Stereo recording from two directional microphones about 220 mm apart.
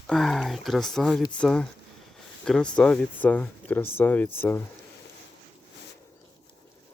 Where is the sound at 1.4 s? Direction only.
5° left (ahead or behind).